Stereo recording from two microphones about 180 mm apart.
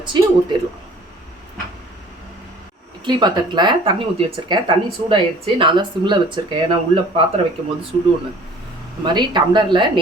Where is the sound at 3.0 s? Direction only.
25° right (ahead or behind).